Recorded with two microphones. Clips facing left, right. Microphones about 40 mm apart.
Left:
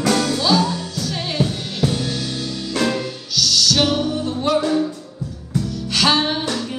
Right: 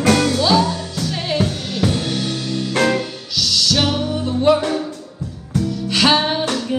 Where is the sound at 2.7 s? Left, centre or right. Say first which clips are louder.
Right 3 dB; right.